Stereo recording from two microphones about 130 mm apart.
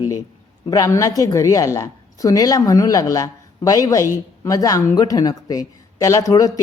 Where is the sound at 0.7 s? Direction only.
25° left (ahead or behind).